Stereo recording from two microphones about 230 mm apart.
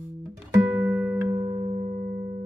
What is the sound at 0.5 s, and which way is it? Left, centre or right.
Music, centre.